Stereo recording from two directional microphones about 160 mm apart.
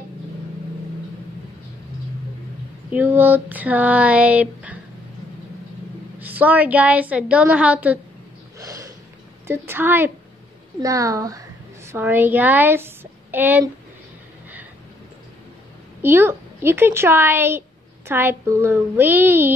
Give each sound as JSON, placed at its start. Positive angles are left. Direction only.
{"t": 2.9, "sound": "a woman's voice", "side_deg": -10}
{"t": 6.1, "sound": "a woman's voice", "side_deg": -10}
{"t": 8.5, "sound": "snort", "side_deg": -20}
{"t": 9.5, "sound": "a woman's voice", "side_deg": -15}
{"t": 16.0, "sound": "a woman's voice", "side_deg": -15}